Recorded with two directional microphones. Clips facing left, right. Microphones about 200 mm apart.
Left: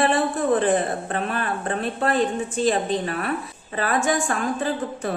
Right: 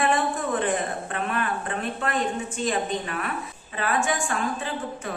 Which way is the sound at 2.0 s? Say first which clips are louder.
Left 6 dB; 35° left (ahead or behind).